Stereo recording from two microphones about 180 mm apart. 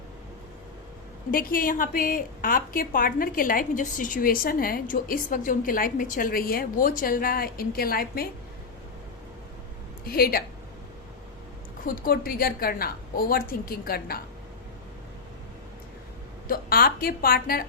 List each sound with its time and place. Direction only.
1.3 s a woman's voice: 55° left (ahead or behind)
10.1 s a woman's voice: 55° left (ahead or behind)
12.0 s a woman's voice: 55° left (ahead or behind)
16.5 s a woman's voice: 55° left (ahead or behind)